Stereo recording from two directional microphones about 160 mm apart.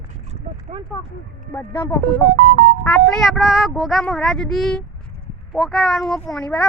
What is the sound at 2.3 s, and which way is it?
Speech, 60° right (ahead or behind).